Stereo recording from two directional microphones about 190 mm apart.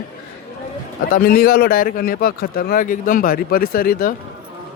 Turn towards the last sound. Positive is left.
turn(degrees=50)  # may be behind; listen again after turning